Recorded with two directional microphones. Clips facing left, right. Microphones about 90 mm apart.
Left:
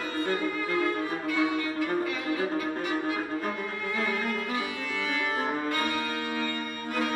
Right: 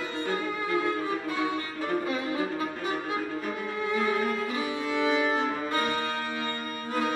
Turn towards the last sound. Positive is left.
turn(degrees=-30)  # may be behind; listen again after turning